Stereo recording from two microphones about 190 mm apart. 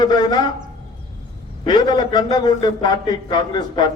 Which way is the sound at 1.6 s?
20° left (ahead or behind).